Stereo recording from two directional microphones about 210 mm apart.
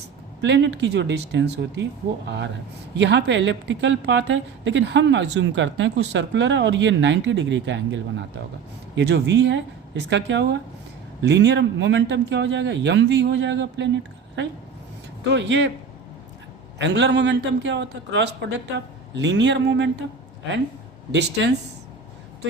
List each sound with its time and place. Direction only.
0.4 s a woman's voice: 55° right (ahead or behind)
16.7 s a woman's voice: 55° right (ahead or behind)
21.1 s a woman's voice: 55° right (ahead or behind)